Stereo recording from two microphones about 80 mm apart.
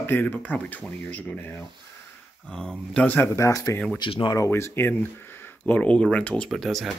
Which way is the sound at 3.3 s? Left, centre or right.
Left.